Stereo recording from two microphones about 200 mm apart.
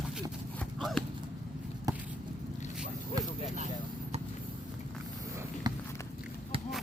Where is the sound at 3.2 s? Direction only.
20° right (ahead or behind).